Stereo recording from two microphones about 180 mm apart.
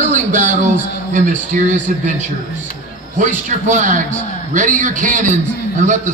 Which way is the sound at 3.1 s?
45° right (ahead or behind).